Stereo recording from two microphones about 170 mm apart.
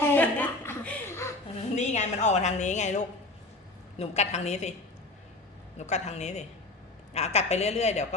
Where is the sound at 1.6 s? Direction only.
40° left (ahead or behind).